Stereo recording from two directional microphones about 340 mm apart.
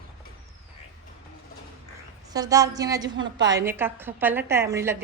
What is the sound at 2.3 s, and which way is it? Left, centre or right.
A woman's voice, centre.